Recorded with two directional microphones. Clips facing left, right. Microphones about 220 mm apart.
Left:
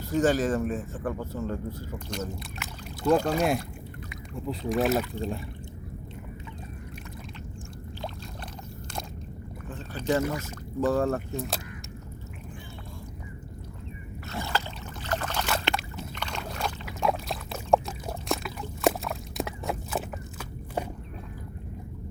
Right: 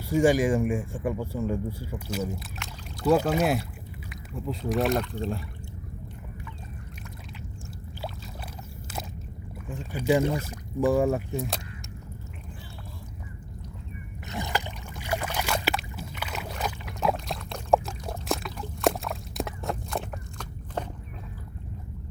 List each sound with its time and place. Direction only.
0.0 s speech: 10° right (ahead or behind)
9.6 s speech: 10° right (ahead or behind)
10.2 s speech: 30° right (ahead or behind)
10.5 s speech: 10° right (ahead or behind)
14.3 s a sound: 15° right (ahead or behind)
15.0 s boat: 10° right (ahead or behind)
15.6 s a sound: 5° right (ahead or behind)